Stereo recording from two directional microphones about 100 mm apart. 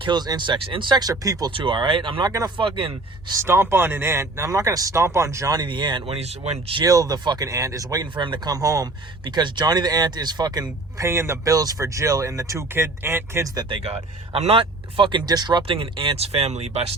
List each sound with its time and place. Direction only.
0.0 s speech: 45° right (ahead or behind)
1.5 s speech: 55° right (ahead or behind)
3.3 s speech: 25° right (ahead or behind)
5.5 s speech: 50° right (ahead or behind)
6.1 s speech: 90° right
6.8 s speech: 40° right (ahead or behind)
8.1 s speech: 55° right (ahead or behind); by 8.9 s 35° right (ahead or behind)
9.2 s speech: 50° right (ahead or behind)
11.0 s speech: 25° right (ahead or behind)
13.7 s speech: 90° right; by 15.2 s 60° right (ahead or behind)
15.3 s speech: 45° right (ahead or behind); by 16.9 s 90° right